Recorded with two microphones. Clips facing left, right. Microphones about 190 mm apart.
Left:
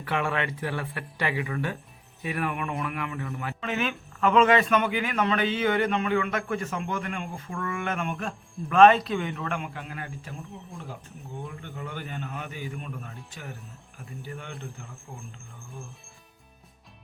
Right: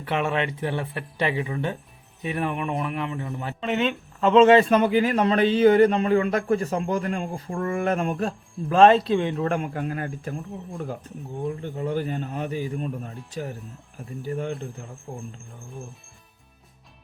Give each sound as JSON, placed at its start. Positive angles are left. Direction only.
{"t": 0.0, "sound": "speech", "side_deg": -20}
{"t": 11.4, "sound": "speech", "side_deg": -35}